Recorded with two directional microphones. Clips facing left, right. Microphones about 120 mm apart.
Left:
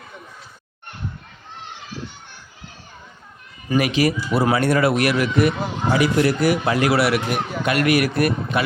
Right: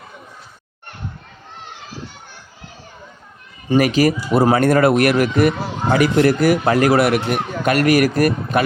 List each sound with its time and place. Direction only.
3.8 s speech: 40° right (ahead or behind)